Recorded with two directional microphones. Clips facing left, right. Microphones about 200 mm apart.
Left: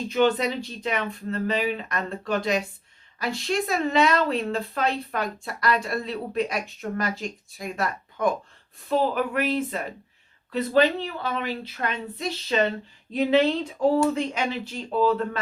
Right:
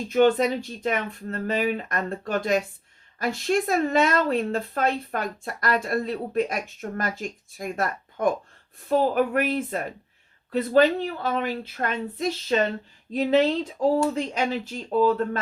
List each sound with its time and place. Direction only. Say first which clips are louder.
0.1 s speech: right 3 dB; 50° right (ahead or behind)